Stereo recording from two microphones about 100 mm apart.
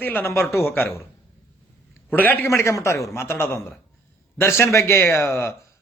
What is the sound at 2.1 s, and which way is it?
A man's voice, 20° left (ahead or behind).